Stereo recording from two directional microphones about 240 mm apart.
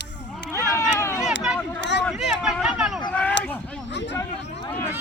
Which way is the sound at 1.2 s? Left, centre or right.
Centre.